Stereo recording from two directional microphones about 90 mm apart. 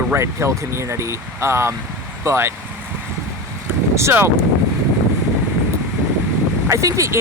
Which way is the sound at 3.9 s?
30° right (ahead or behind).